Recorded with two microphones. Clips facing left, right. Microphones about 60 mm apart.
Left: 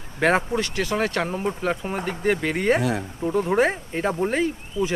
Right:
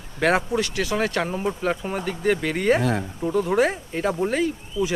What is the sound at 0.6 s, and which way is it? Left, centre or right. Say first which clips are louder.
Speech: right 1 dB; left.